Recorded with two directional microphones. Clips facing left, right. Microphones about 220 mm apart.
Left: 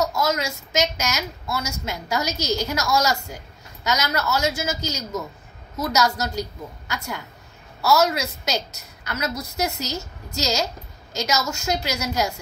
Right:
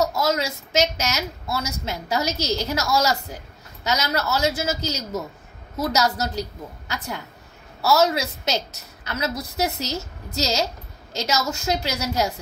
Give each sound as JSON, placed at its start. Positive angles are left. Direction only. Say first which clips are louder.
{"t": 0.0, "sound": "a woman's voice", "louder": "right 1 dB", "side_deg": -30}
{"t": 7.8, "sound": "a woman's voice", "louder": "even", "side_deg": -30}